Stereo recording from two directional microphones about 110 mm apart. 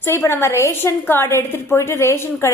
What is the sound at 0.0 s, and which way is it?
A woman's voice, 25° left (ahead or behind).